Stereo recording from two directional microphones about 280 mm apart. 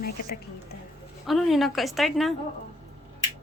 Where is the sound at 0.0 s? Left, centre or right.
Left.